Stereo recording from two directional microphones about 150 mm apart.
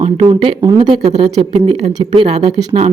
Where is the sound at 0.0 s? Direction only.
40° right (ahead or behind).